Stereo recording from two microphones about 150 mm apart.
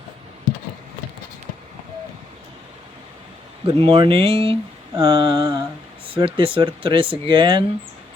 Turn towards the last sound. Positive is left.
turn(degrees=-35)  # may be behind; listen again after turning